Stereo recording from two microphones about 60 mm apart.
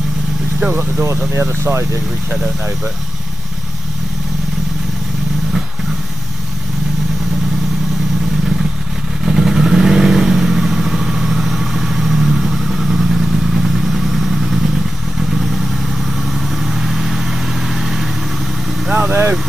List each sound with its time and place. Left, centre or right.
1.5 s speech: right
9.2 s vehicle: centre